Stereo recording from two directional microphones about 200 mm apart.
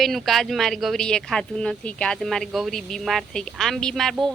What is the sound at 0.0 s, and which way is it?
A woman's voice, centre (ahead or behind).